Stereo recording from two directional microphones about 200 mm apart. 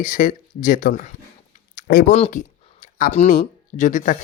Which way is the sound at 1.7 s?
50° left (ahead or behind).